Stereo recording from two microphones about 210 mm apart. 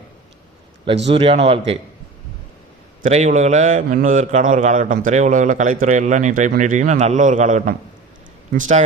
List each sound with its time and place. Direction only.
1.0 s speech: 30° right (ahead or behind)
3.0 s a man's voice: 35° right (ahead or behind)